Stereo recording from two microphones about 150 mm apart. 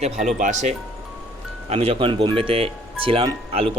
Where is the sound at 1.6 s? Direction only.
45° right (ahead or behind).